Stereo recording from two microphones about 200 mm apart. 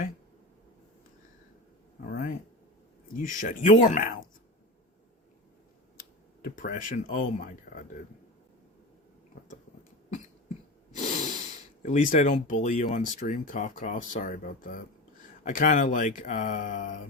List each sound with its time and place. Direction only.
2.0 s a sound: 40° left (ahead or behind)
3.2 s speech: 40° left (ahead or behind)
6.0 s speech: 45° left (ahead or behind)
10.9 s snort: 40° left (ahead or behind)
11.8 s speech: 40° left (ahead or behind)